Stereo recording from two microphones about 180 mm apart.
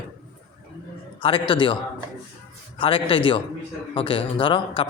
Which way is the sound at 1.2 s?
30° left (ahead or behind).